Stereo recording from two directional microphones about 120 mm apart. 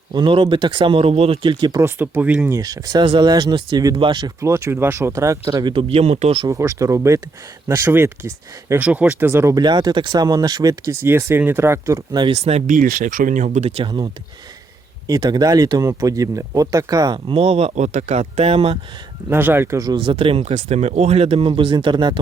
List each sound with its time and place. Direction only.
0.1 s speech: 40° right (ahead or behind)
2.0 s speech: 15° right (ahead or behind)
2.5 s speech: 30° right (ahead or behind)
3.0 s speech: 40° right (ahead or behind)
4.2 s speech: 25° right (ahead or behind)
5.7 s speech: 60° right (ahead or behind)
6.5 s speech: 25° right (ahead or behind)
9.6 s speech: 35° right (ahead or behind)
12.2 s speech: 55° right (ahead or behind); by 13.7 s 90° right
13.7 s speech: 50° right (ahead or behind)
15.0 s speech: 35° right (ahead or behind)
17.3 s speech: 60° right (ahead or behind)
19.3 s speech: 15° right (ahead or behind)
20.0 s speech: 50° right (ahead or behind)